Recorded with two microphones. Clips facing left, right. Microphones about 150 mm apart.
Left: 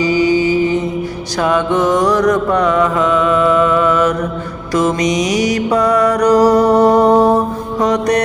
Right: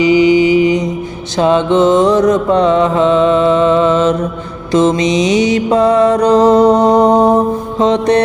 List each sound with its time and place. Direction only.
0.0 s mantra: 20° right (ahead or behind)
1.4 s music: 25° right (ahead or behind)